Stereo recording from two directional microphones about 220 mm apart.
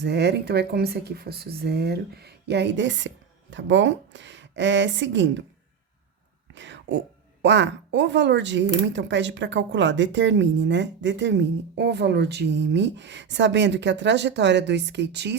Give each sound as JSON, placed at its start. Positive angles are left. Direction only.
{"t": 0.0, "sound": "speech", "side_deg": -50}
{"t": 6.5, "sound": "a sound", "side_deg": -55}
{"t": 7.4, "sound": "speech", "side_deg": -55}